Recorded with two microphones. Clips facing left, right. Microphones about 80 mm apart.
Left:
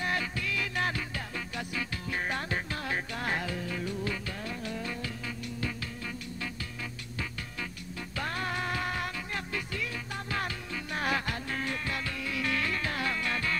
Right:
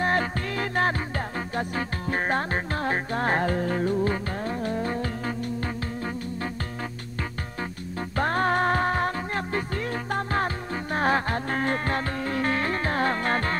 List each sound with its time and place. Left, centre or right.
0.0 s music: right
8.2 s music: right